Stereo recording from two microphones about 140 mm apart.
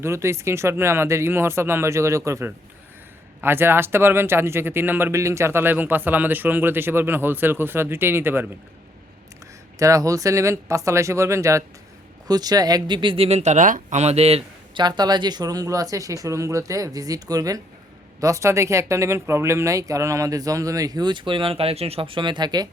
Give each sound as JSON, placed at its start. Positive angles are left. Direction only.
{"t": 0.0, "sound": "speech", "side_deg": -20}
{"t": 9.7, "sound": "speech", "side_deg": -25}
{"t": 14.8, "sound": "speech", "side_deg": -30}